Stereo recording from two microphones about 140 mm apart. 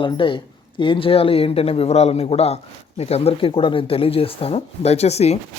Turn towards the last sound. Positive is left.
turn(degrees=50)  # may be behind; listen again after turning